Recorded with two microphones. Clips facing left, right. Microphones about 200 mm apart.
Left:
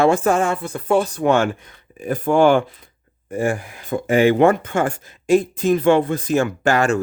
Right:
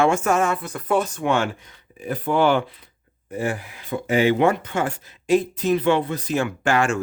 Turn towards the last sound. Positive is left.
turn(degrees=40)  # may be behind; listen again after turning